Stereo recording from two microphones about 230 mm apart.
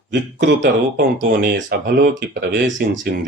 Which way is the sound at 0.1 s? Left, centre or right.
Right.